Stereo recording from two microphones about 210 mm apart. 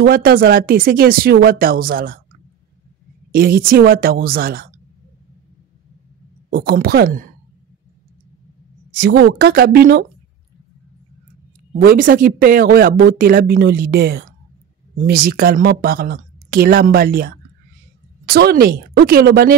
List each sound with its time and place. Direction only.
0.0 s speech: 45° right (ahead or behind)
3.3 s speech: 45° right (ahead or behind)
6.5 s speech: 45° right (ahead or behind)
9.0 s speech: 50° right (ahead or behind)
11.8 s speech: 45° right (ahead or behind)